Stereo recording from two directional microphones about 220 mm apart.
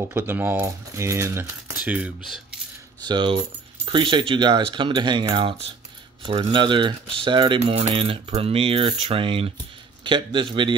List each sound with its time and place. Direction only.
0.1 s coin: 10° right (ahead or behind)
3.1 s speech: 20° right (ahead or behind)